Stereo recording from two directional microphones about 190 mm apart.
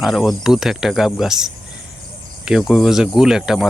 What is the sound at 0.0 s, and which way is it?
Speech, centre (ahead or behind).